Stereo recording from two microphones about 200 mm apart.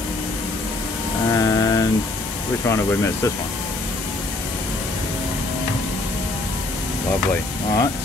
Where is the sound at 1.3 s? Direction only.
15° left (ahead or behind).